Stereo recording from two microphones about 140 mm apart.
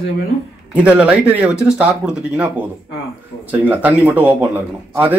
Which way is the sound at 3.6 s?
10° right (ahead or behind).